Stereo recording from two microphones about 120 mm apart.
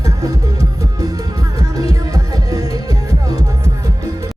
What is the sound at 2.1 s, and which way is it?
Music, 30° right (ahead or behind).